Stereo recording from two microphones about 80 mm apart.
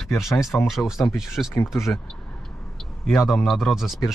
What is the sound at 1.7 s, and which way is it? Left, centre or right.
Speech, left.